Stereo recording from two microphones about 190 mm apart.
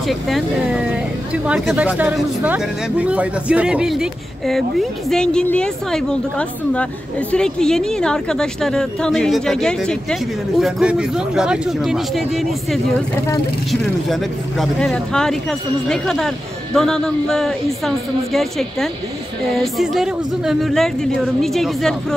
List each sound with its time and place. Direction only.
0.3 s speech: 5° right (ahead or behind)
14.6 s speech: 5° left (ahead or behind)